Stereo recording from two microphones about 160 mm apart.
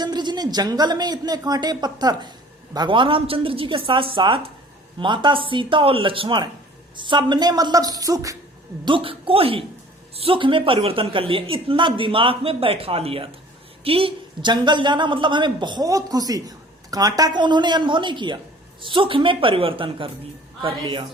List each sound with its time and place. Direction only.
0.0 s a woman's voice: 25° right (ahead or behind)
8.8 s a woman's voice: 30° right (ahead or behind)